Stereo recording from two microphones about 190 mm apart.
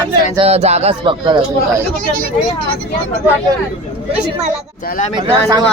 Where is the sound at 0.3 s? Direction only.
35° right (ahead or behind).